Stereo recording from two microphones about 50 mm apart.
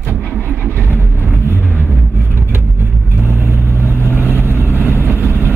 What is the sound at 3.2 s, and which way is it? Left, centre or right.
Vehicle, right.